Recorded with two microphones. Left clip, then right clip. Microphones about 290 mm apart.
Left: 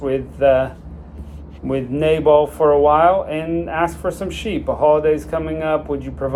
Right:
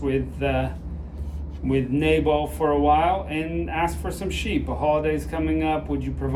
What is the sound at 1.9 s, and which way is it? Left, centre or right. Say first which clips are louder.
Speech: left 8 dB; left.